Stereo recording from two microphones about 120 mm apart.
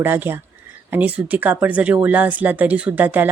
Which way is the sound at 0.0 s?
15° right (ahead or behind).